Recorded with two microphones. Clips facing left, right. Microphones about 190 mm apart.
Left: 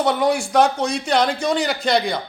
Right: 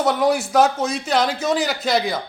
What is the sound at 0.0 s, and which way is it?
A man's voice, centre (ahead or behind).